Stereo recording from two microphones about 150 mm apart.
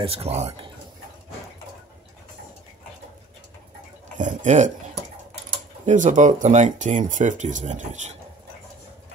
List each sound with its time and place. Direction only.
0.0 s speech: 40° right (ahead or behind)
4.2 s speech: 55° right (ahead or behind)
5.9 s speech: 55° right (ahead or behind)